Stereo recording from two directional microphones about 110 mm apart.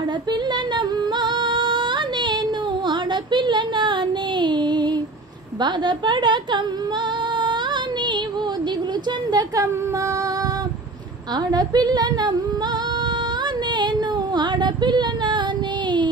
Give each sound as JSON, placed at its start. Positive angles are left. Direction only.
{"t": 0.3, "sound": "female singing", "side_deg": -45}
{"t": 2.9, "sound": "a sound", "side_deg": -45}
{"t": 5.6, "sound": "a woman's voice", "side_deg": -45}
{"t": 9.3, "sound": "speech", "side_deg": -40}
{"t": 11.3, "sound": "speech", "side_deg": -40}
{"t": 14.3, "sound": "a sound", "side_deg": -40}